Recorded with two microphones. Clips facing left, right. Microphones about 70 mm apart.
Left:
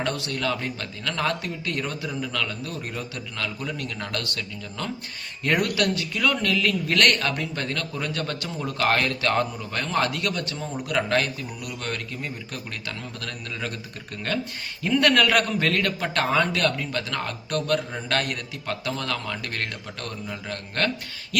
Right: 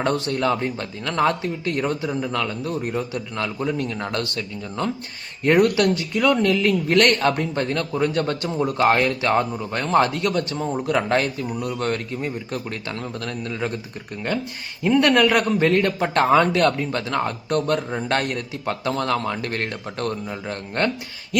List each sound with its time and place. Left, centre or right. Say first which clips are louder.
0.0 s speech: right 6 dB; right
14.8 s speech: right 4 dB; right